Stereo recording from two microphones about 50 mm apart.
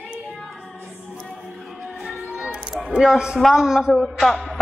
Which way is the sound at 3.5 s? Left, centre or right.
Centre.